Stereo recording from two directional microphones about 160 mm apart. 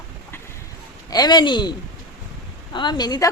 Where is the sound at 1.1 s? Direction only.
25° left (ahead or behind).